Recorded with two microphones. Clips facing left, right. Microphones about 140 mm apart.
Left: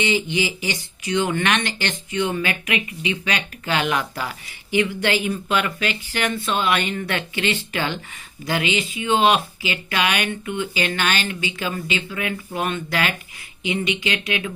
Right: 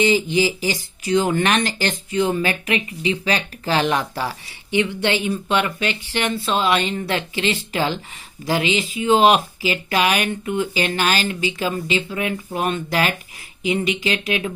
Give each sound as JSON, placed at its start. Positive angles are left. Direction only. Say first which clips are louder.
{"t": 0.0, "sound": "speech", "louder": "right 5 dB", "side_deg": -35}